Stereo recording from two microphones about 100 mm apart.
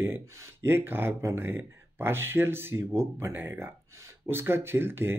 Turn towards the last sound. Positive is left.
turn(degrees=-20)  # may be behind; listen again after turning